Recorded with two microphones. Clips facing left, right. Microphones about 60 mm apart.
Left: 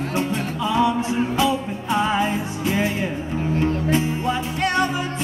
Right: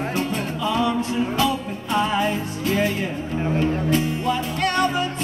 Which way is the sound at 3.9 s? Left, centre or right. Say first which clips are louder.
Even; left.